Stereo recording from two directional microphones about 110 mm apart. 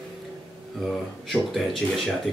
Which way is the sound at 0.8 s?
Centre (ahead or behind).